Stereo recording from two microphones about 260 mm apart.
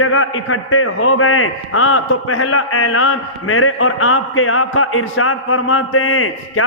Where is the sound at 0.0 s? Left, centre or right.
Left.